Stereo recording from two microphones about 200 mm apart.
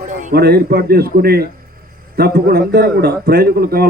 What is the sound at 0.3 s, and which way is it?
A man's voice, 50° right (ahead or behind).